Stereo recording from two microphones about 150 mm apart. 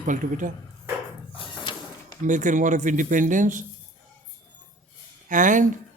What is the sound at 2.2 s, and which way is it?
A man's voice, 55° right (ahead or behind).